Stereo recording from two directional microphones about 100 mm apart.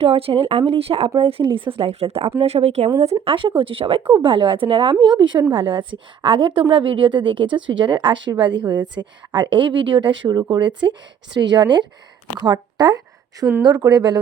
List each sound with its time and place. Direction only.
0.0 s speech: 70° right (ahead or behind); by 2.9 s 90° right
3.2 s a woman's voice: 60° right (ahead or behind)
9.0 s a woman's voice: 30° right (ahead or behind)
9.3 s a woman's voice: 55° right (ahead or behind)